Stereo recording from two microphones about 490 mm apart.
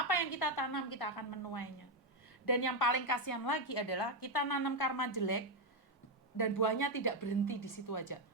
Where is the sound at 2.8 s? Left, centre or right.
Left.